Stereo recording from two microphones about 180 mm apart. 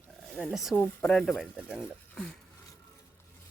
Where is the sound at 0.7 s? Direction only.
10° left (ahead or behind).